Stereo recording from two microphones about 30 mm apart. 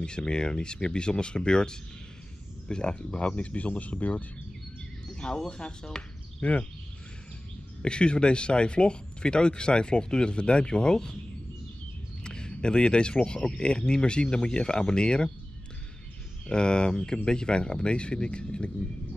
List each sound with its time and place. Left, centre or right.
0.0 s speech: left
5.1 s a sound: left
5.5 s speech: left
6.4 s speech: left
7.8 s speech: left
12.2 s speech: left
16.4 s speech: left